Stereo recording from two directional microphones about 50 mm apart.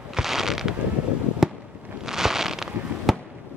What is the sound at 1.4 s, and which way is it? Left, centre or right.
Fireworks, centre.